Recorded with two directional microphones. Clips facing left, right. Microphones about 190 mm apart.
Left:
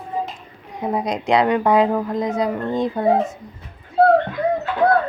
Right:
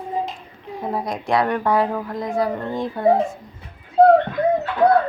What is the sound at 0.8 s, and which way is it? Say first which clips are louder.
A woman's voice: left 3 dB; 20° left (ahead or behind).